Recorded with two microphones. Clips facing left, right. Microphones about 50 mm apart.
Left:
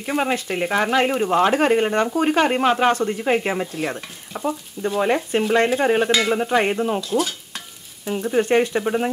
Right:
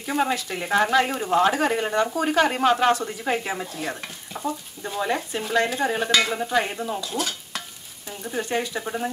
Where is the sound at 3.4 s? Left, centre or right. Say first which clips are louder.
Left 6 dB; left.